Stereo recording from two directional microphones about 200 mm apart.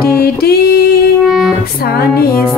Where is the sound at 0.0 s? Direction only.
50° left (ahead or behind).